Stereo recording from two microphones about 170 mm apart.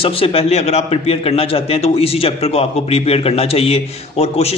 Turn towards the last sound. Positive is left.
turn(degrees=35)  # may be behind; listen again after turning